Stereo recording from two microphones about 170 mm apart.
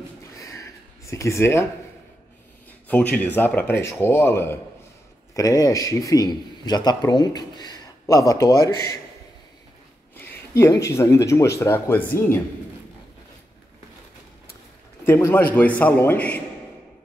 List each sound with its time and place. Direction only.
1.0 s speech: 15° left (ahead or behind)
2.9 s a man's voice: 10° left (ahead or behind)
10.1 s speech: 15° left (ahead or behind)
15.0 s speech: 15° left (ahead or behind)